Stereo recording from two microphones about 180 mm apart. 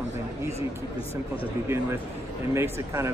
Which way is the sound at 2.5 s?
15° right (ahead or behind).